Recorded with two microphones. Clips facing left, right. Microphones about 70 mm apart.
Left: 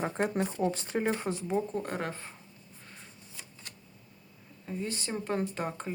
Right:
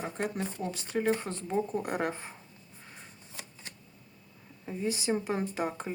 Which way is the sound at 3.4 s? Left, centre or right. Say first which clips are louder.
Right 4 dB; right.